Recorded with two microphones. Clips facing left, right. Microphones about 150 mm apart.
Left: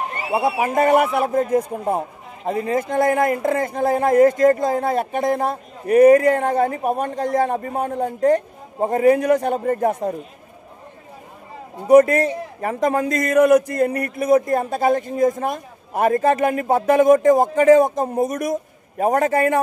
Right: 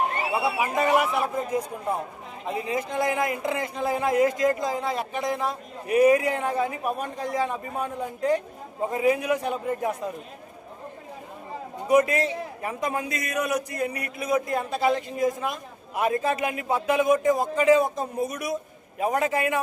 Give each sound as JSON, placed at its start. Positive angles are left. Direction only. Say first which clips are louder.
{"t": 0.3, "sound": "a man's voice", "louder": "left 6 dB", "side_deg": 50}
{"t": 11.9, "sound": "a man's voice", "louder": "left 8 dB", "side_deg": 50}